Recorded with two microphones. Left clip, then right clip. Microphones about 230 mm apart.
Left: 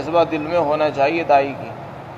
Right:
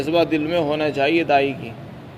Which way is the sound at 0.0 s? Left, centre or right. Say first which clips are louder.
Left 1 dB; right.